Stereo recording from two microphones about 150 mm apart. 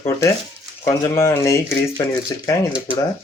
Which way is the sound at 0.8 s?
20° left (ahead or behind).